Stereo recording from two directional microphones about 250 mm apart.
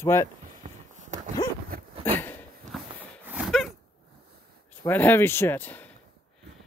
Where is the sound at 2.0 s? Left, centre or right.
Centre.